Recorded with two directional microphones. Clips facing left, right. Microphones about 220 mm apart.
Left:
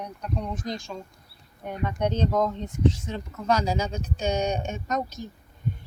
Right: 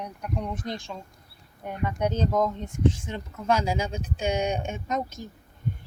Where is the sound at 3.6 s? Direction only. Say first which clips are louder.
Left 1 dB; 10° right (ahead or behind).